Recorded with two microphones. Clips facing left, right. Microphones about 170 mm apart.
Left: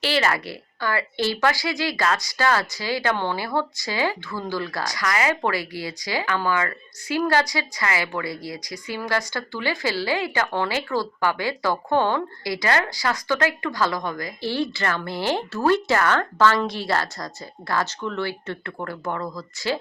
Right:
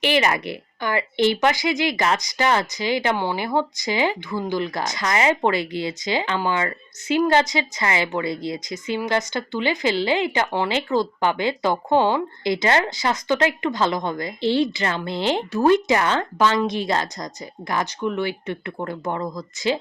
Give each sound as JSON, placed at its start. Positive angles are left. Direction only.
{"t": 0.0, "sound": "speech", "side_deg": -15}